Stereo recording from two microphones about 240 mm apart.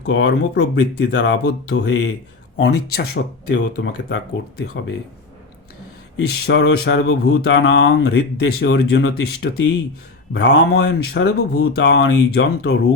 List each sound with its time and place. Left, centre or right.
0.0 s speech: left
6.2 s speech: left
10.3 s speech: left